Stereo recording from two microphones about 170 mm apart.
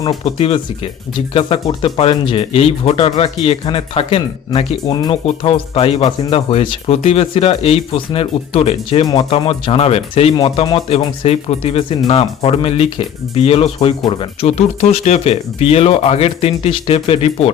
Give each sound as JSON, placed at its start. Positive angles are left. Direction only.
{"t": 0.0, "sound": "speech", "side_deg": 25}